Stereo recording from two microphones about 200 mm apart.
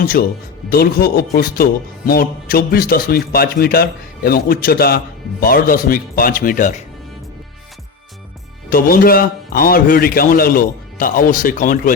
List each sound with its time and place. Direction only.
0.0 s a man's voice: 50° left (ahead or behind)
8.7 s a man's voice: 45° left (ahead or behind)